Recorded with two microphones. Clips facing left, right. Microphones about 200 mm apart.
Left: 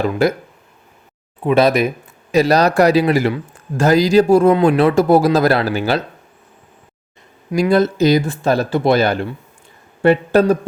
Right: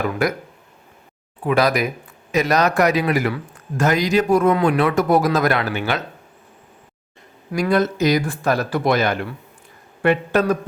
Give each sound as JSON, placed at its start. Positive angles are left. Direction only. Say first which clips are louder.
{"t": 0.0, "sound": "speech", "louder": "left 5 dB", "side_deg": 25}
{"t": 1.5, "sound": "speech", "louder": "left 5 dB", "side_deg": 25}
{"t": 7.5, "sound": "speech", "louder": "left 4 dB", "side_deg": 30}